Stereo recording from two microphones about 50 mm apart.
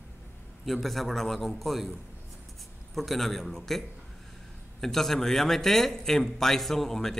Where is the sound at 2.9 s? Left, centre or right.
Centre.